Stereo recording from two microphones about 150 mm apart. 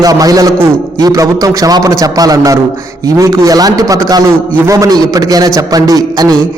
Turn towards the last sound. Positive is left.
turn(degrees=-25)  # may be behind; listen again after turning